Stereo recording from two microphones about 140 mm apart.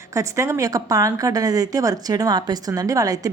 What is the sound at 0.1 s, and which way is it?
A woman's voice, 20° right (ahead or behind).